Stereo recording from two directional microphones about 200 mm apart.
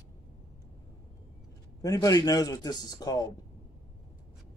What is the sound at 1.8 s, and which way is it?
A man's voice, 15° left (ahead or behind).